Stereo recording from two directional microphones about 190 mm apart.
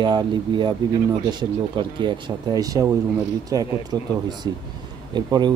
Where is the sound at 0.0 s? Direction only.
25° right (ahead or behind).